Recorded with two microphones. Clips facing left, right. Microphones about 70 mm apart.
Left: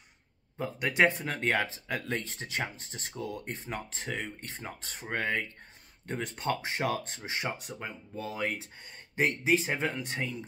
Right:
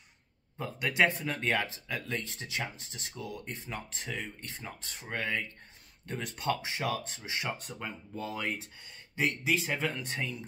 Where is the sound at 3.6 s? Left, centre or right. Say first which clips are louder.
Left 3 dB; left.